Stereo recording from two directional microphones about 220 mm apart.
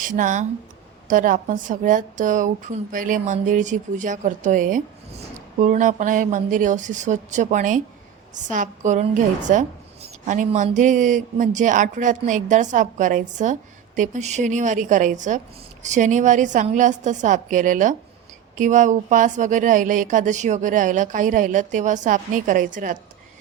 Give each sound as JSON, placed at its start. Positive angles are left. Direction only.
{"t": 0.0, "sound": "speech", "side_deg": -35}